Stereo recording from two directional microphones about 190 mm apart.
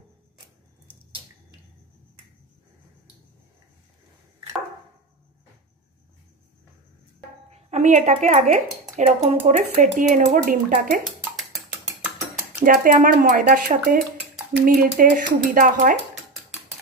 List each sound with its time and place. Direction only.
7.4 s speech: 35° right (ahead or behind)
12.5 s dishes: 45° right (ahead or behind)